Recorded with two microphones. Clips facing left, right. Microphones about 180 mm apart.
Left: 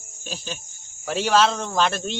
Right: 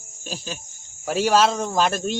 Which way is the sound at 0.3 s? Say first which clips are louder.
Right 1 dB; 5° right (ahead or behind).